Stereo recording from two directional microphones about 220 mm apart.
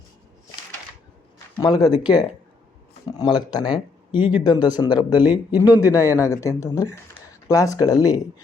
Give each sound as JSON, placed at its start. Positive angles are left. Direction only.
{"t": 1.6, "sound": "speech", "side_deg": 20}